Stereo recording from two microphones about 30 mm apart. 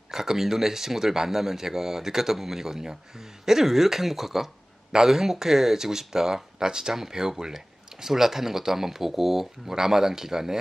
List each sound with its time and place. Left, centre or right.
0.1 s speech: centre